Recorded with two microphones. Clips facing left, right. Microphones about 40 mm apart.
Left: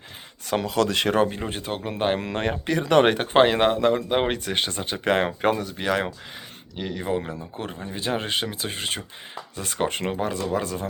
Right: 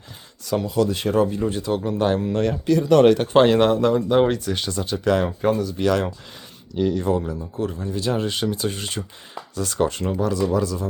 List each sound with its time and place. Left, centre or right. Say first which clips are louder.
0.6 s speech: even; left
3.3 s speech: right 3 dB; left
5.2 s speech: right 2 dB; left
5.7 s speech: right 4 dB; left
7.3 s speech: right 6 dB; left